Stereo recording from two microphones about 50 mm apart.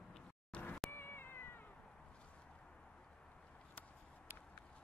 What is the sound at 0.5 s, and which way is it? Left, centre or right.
Cat, centre.